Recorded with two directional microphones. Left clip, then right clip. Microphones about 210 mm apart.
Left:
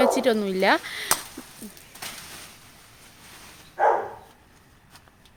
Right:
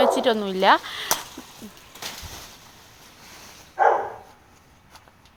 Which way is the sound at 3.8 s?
15° left (ahead or behind).